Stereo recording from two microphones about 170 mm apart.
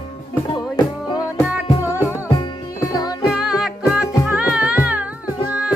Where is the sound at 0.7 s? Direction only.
25° left (ahead or behind).